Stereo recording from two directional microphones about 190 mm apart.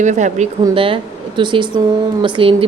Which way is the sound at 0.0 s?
40° right (ahead or behind).